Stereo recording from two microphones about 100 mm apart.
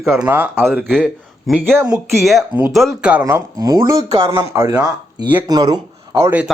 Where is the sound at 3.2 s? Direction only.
35° right (ahead or behind).